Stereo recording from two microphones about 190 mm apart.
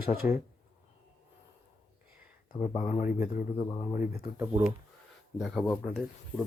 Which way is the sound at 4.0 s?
10° right (ahead or behind).